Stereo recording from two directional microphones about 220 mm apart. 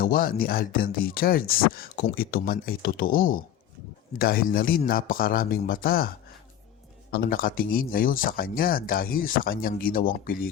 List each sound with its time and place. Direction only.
0.0 s speech: 40° left (ahead or behind)
7.1 s speech: 40° left (ahead or behind)